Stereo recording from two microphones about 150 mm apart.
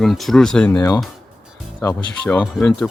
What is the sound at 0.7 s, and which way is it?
Speech, 25° left (ahead or behind).